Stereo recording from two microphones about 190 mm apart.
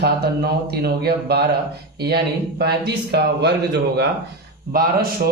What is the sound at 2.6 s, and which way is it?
Speech, 60° right (ahead or behind).